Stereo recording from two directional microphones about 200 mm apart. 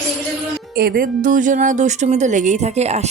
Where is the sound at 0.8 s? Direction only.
50° right (ahead or behind); by 3.1 s 35° right (ahead or behind).